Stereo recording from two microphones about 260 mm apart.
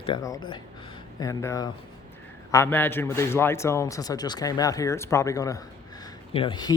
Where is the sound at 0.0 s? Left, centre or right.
Centre.